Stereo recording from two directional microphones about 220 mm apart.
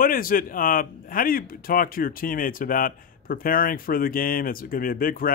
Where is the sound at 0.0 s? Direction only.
40° left (ahead or behind).